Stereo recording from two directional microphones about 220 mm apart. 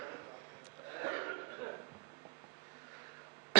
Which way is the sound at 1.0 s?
15° right (ahead or behind).